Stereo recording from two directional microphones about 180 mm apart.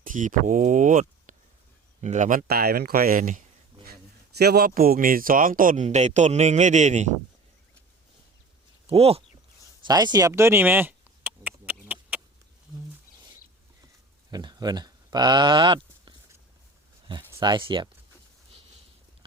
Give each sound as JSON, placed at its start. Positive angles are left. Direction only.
{"t": 0.0, "sound": "speech", "side_deg": -45}
{"t": 2.5, "sound": "speech", "side_deg": -60}
{"t": 4.4, "sound": "speech", "side_deg": -60}
{"t": 8.9, "sound": "speech", "side_deg": -35}
{"t": 9.8, "sound": "a sound", "side_deg": -25}
{"t": 14.3, "sound": "speech", "side_deg": -20}
{"t": 17.4, "sound": "speech", "side_deg": -25}